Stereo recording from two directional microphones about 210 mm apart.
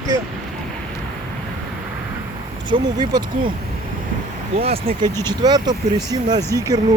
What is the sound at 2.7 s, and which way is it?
Speech, 20° right (ahead or behind).